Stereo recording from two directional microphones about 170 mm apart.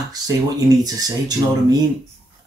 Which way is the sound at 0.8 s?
20° right (ahead or behind).